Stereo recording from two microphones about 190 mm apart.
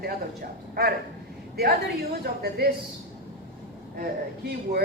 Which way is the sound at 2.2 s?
55° right (ahead or behind).